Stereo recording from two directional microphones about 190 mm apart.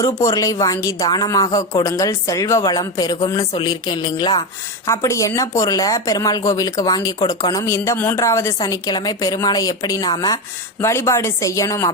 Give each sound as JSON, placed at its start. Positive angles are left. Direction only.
{"t": 0.0, "sound": "speech", "side_deg": 15}
{"t": 3.5, "sound": "music", "side_deg": 20}
{"t": 4.9, "sound": "speech", "side_deg": 15}